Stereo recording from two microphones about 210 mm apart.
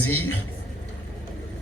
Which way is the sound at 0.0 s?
90° left.